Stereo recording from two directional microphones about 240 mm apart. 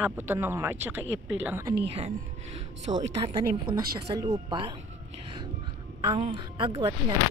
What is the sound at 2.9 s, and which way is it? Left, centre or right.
A woman's voice, centre.